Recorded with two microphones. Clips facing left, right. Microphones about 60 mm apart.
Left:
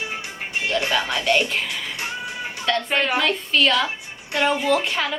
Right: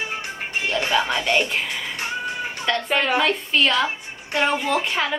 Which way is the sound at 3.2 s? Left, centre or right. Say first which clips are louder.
Even; centre.